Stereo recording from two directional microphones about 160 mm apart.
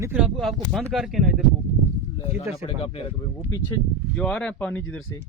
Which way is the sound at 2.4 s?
35° left (ahead or behind).